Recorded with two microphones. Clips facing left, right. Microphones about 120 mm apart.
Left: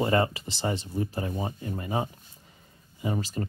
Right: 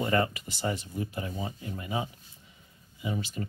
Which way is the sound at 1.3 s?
45° left (ahead or behind).